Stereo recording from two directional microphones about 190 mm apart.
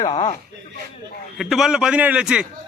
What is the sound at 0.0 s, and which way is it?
Speech, 25° left (ahead or behind).